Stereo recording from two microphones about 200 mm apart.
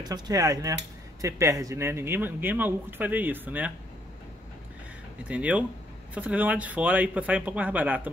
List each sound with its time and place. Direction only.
0.0 s speech: 20° right (ahead or behind)
5.3 s speech: 5° right (ahead or behind)